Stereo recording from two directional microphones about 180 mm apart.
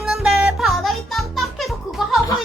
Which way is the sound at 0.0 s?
5° right (ahead or behind).